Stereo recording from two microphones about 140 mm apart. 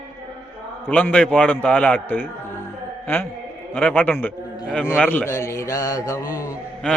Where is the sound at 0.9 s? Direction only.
10° left (ahead or behind).